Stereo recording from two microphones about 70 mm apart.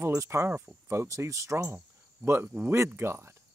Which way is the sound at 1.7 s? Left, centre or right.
Right.